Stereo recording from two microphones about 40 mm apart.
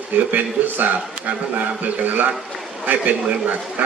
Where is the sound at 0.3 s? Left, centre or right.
Right.